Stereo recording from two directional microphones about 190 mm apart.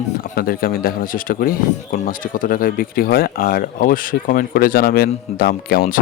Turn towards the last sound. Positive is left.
turn(degrees=50)  # may be behind; listen again after turning